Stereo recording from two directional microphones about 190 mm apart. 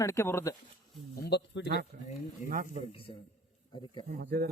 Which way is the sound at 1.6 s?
55° right (ahead or behind).